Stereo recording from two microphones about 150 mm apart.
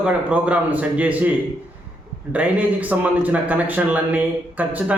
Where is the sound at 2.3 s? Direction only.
10° right (ahead or behind).